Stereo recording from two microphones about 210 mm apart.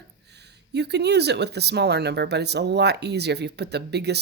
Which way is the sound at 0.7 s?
55° right (ahead or behind).